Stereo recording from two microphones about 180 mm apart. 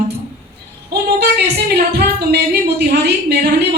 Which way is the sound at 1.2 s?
60° right (ahead or behind).